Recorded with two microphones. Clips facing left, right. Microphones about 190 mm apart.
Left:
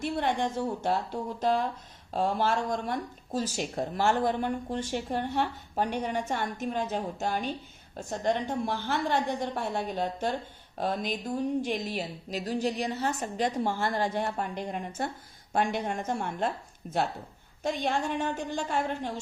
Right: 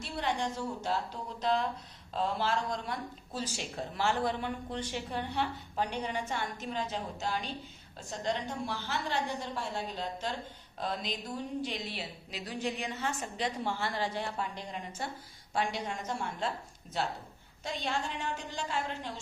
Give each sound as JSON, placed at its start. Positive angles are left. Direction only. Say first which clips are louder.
{"t": 0.0, "sound": "speech", "louder": "left 5 dB", "side_deg": 55}